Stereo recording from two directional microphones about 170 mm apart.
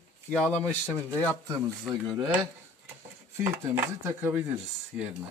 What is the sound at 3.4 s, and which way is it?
Speech, 15° right (ahead or behind).